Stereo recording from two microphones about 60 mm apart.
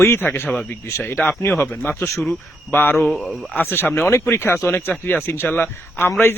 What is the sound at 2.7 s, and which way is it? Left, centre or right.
Speech, left.